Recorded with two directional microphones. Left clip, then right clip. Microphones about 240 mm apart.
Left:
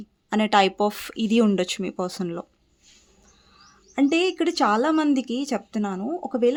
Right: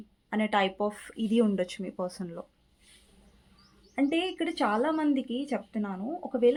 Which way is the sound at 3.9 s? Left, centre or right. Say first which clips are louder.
Left 7 dB; left.